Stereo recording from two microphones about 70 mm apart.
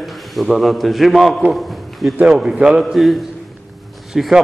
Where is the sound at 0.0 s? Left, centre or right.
Centre.